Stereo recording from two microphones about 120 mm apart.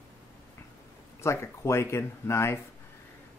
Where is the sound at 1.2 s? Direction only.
25° left (ahead or behind).